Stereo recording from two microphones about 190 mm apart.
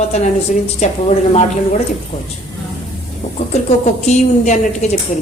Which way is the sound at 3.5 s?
35° left (ahead or behind).